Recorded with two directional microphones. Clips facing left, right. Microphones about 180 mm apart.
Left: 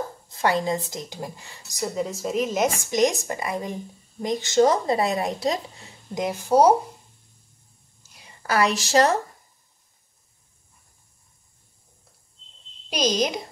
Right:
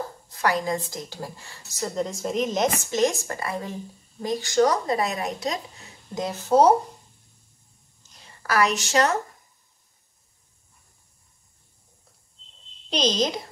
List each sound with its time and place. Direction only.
0.3 s a woman's voice: 25° left (ahead or behind)
6.1 s speech: 15° left (ahead or behind)
8.0 s a sound: 10° left (ahead or behind)
8.4 s speech: 30° left (ahead or behind)
12.9 s speech: 10° left (ahead or behind)